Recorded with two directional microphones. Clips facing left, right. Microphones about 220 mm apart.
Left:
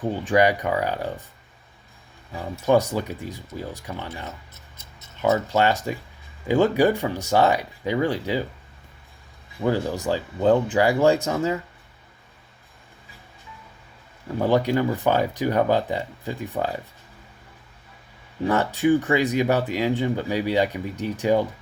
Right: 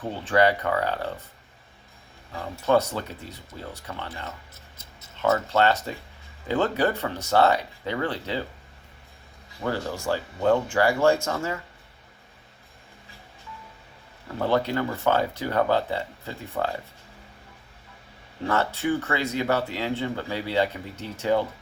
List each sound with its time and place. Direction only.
0.0 s speech: 15° left (ahead or behind)
2.3 s speech: 15° left (ahead or behind)
9.6 s speech: 15° left (ahead or behind)
14.3 s speech: 15° left (ahead or behind)
18.4 s speech: 15° left (ahead or behind)